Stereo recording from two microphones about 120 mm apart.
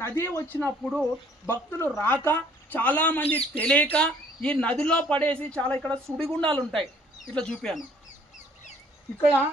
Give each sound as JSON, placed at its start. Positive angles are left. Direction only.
{"t": 0.0, "sound": "speech", "side_deg": 20}
{"t": 0.8, "sound": "speech", "side_deg": -5}
{"t": 1.4, "sound": "speech", "side_deg": 20}
{"t": 6.2, "sound": "speech", "side_deg": -45}
{"t": 7.3, "sound": "speech", "side_deg": 5}